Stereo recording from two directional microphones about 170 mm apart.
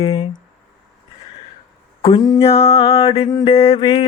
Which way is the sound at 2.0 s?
30° left (ahead or behind).